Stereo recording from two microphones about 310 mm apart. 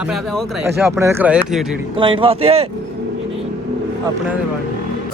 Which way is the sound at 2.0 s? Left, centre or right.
Centre.